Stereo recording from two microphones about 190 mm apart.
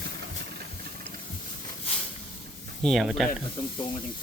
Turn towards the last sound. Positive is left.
turn(degrees=0)  # may be behind; listen again after turning